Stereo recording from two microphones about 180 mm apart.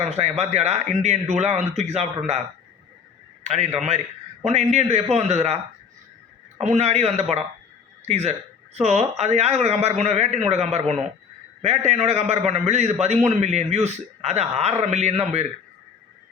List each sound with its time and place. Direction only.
0.0 s a man's voice: 40° right (ahead or behind)
3.4 s a man's voice: 40° right (ahead or behind)
6.6 s a man's voice: 40° right (ahead or behind)